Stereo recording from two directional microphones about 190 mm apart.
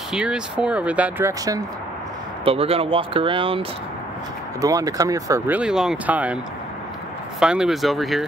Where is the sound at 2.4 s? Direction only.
30° right (ahead or behind).